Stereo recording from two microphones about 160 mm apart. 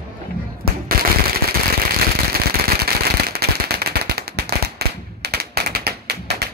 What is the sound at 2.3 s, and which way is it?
Firecracker, 75° right (ahead or behind).